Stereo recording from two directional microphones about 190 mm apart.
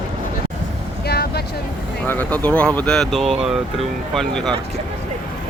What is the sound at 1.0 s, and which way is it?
Vehicle, 60° left (ahead or behind).